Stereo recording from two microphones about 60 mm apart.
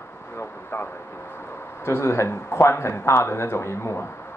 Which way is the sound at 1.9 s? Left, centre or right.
Left.